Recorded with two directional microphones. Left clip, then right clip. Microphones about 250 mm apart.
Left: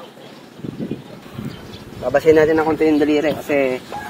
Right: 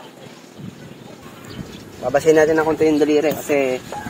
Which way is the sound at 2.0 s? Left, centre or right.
Centre.